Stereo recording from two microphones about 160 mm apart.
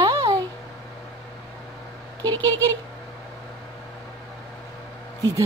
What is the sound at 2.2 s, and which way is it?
Speech, 10° left (ahead or behind).